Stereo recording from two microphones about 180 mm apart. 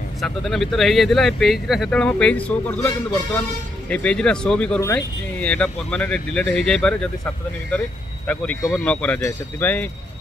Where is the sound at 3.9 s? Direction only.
5° left (ahead or behind).